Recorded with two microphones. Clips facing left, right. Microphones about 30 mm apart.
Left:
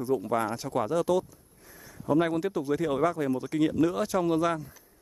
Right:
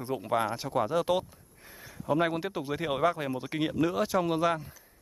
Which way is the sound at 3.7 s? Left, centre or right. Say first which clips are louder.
Left 1 dB; centre.